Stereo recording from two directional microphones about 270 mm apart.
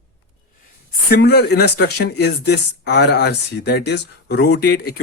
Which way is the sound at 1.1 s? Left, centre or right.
Left.